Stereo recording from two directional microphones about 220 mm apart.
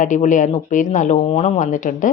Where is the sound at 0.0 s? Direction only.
35° left (ahead or behind).